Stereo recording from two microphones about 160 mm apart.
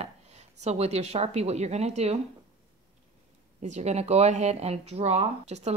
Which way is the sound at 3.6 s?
45° right (ahead or behind).